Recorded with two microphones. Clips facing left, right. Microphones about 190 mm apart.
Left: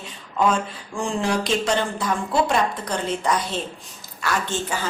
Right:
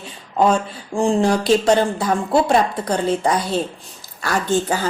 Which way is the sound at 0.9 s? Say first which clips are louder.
Right 7 dB; 35° right (ahead or behind).